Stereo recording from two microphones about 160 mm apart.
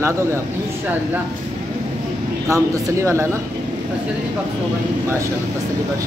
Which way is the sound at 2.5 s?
20° right (ahead or behind).